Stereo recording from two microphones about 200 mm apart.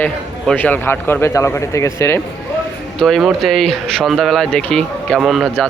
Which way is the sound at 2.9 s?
Centre (ahead or behind).